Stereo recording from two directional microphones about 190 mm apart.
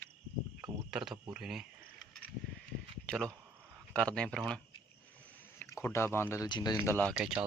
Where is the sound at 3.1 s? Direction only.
5° left (ahead or behind).